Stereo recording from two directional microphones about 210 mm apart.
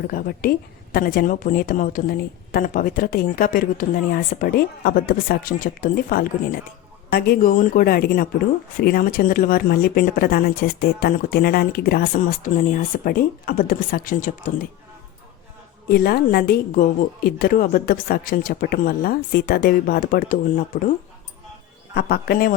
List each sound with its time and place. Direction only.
0.1 s a woman's voice: 45° left (ahead or behind)
15.9 s a woman's voice: 45° left (ahead or behind)
21.9 s a woman's voice: 50° left (ahead or behind)